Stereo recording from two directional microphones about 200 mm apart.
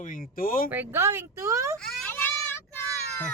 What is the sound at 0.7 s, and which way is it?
A woman's voice, 10° right (ahead or behind).